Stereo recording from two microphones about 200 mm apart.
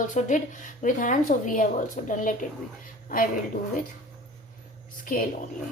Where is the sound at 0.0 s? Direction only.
40° left (ahead or behind).